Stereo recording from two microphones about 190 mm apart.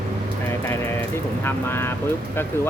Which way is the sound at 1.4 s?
10° left (ahead or behind).